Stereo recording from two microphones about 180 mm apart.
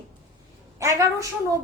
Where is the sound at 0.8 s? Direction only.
15° right (ahead or behind).